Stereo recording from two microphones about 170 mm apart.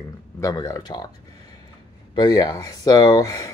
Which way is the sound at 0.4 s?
20° left (ahead or behind).